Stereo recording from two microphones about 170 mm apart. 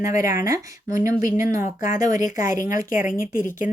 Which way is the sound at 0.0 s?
20° right (ahead or behind).